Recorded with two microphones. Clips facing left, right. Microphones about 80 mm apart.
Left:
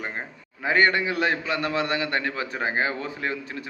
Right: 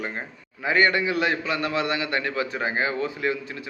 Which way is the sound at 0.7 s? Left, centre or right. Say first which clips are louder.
Even; left.